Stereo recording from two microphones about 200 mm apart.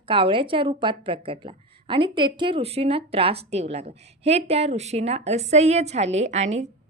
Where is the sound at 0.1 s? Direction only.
25° right (ahead or behind).